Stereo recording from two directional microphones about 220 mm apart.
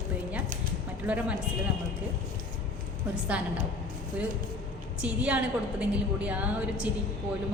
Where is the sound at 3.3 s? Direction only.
5° right (ahead or behind).